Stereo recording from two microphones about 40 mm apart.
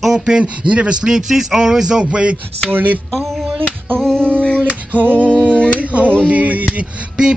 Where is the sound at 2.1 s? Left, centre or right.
Right.